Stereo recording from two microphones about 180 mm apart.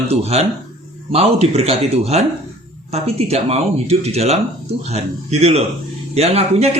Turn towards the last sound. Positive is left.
turn(degrees=-35)  # may be behind; listen again after turning